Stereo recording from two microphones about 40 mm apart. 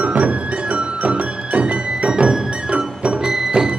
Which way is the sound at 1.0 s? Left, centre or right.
Right.